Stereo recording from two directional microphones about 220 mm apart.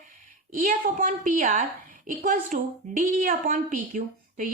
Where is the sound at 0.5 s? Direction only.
40° right (ahead or behind).